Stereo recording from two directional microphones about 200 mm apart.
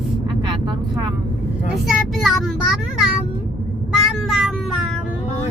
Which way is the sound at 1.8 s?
Centre (ahead or behind).